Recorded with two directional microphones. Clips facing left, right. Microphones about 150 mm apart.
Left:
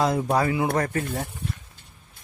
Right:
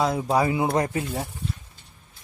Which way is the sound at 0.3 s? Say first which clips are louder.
Right 1 dB; 20° right (ahead or behind).